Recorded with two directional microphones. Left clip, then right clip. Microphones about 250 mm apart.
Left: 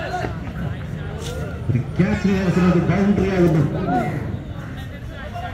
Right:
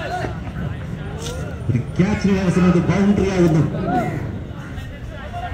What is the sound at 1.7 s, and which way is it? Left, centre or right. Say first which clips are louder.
A man's voice: right 1 dB; right.